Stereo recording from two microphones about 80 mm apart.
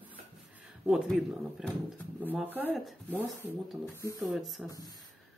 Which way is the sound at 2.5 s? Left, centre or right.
Right.